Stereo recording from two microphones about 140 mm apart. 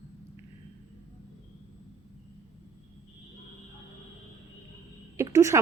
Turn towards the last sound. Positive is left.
turn(degrees=-20)  # may be behind; listen again after turning